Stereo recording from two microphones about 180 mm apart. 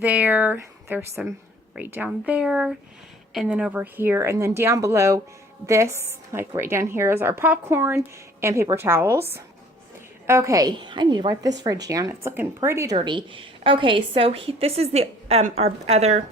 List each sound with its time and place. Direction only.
0.0 s a woman's voice: 10° right (ahead or behind)
10.2 s a woman's voice: 15° right (ahead or behind)
13.0 s a woman's voice: 30° right (ahead or behind)